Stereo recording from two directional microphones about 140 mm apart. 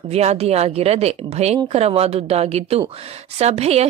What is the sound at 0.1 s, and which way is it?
A woman's voice, 50° right (ahead or behind).